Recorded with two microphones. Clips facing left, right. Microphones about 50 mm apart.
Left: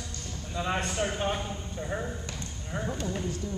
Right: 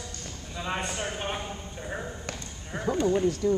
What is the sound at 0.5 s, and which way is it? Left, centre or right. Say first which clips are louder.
A man's voice: left 2 dB; centre.